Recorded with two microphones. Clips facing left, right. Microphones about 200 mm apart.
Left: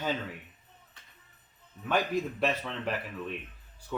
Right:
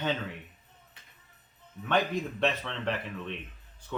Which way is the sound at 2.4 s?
5° left (ahead or behind).